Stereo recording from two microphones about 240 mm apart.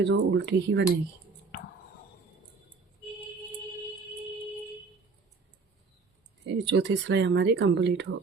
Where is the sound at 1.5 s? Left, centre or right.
Left.